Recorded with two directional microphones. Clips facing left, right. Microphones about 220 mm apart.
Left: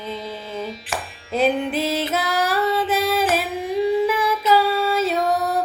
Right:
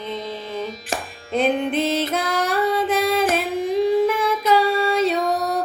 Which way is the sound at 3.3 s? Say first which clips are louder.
Right 2 dB; 5° left (ahead or behind).